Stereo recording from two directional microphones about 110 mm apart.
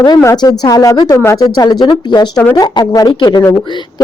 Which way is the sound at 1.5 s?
40° left (ahead or behind).